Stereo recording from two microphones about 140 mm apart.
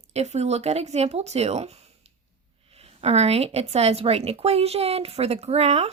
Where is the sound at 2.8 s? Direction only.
45° right (ahead or behind).